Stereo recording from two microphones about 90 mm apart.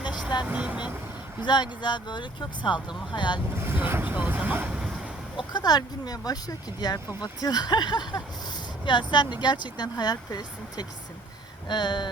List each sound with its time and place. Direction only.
0.4 s speech: 15° right (ahead or behind)
1.4 s speech: 55° left (ahead or behind)
3.6 s speech: 25° right (ahead or behind)
5.4 s speech: 55° left (ahead or behind)